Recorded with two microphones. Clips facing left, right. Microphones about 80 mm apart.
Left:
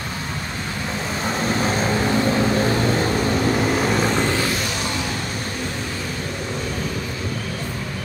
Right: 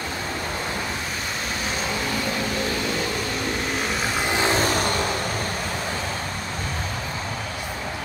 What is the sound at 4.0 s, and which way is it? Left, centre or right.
Vehicle, centre.